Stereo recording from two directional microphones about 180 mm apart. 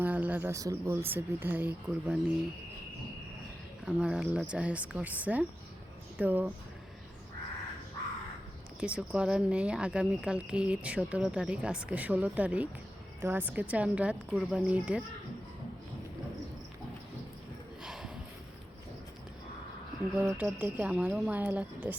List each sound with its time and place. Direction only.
0.0 s speech: 10° right (ahead or behind)
3.8 s speech: 5° right (ahead or behind)
8.8 s speech: 5° right (ahead or behind)
17.8 s sniff: centre (ahead or behind)
20.1 s speech: 10° right (ahead or behind)